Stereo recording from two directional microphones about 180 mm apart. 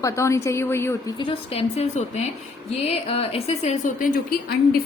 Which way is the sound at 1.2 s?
30° left (ahead or behind).